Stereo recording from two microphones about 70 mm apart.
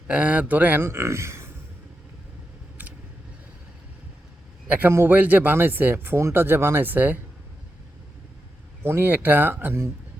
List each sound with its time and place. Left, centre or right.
0.1 s speech: centre
0.9 s speech: right
4.9 s speech: right
8.8 s speech: right